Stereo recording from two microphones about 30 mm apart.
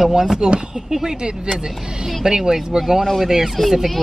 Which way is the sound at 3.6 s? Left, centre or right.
Centre.